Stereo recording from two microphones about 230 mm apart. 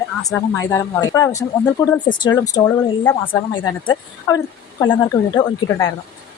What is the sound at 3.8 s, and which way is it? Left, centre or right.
A woman's voice, centre.